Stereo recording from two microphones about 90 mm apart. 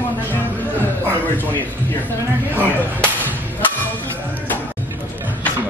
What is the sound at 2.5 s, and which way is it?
Speech, 20° right (ahead or behind).